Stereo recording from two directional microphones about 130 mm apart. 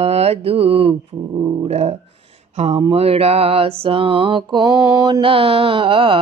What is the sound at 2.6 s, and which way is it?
Mantra, 50° right (ahead or behind).